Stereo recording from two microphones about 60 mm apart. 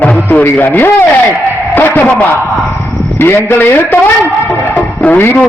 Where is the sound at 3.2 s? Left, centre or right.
Left.